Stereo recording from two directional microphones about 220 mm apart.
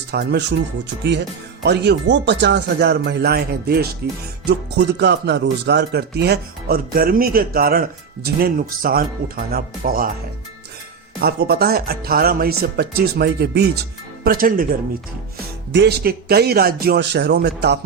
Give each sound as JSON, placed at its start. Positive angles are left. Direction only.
{"t": 0.1, "sound": "speech", "side_deg": -50}
{"t": 1.6, "sound": "speech", "side_deg": -50}
{"t": 11.2, "sound": "speech", "side_deg": -45}
{"t": 15.7, "sound": "speech", "side_deg": -50}